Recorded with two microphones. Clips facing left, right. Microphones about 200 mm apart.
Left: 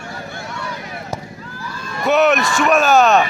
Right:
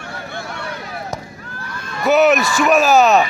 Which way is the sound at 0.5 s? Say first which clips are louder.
Even; 60° right (ahead or behind).